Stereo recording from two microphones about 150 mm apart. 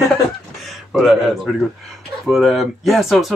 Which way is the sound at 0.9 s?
Centre (ahead or behind).